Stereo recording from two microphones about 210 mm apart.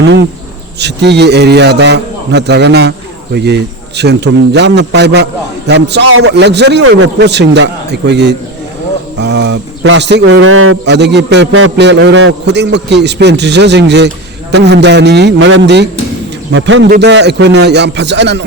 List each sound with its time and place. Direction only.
0.8 s a man's voice: 55° right (ahead or behind)
10.4 s a man's voice: 85° right
10.8 s a man's voice: 55° right (ahead or behind)